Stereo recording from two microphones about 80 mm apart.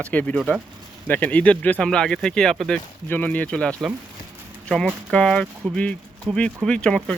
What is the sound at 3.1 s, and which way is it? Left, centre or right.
Speech, centre.